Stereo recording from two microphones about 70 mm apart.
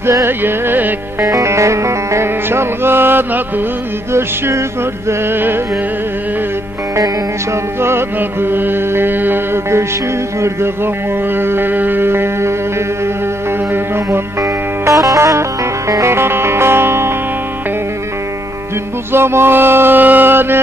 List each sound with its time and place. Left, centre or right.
0.0 s music: right
1.2 s music: right
7.8 s music: right
11.3 s music: right
14.4 s music: right
19.1 s music: right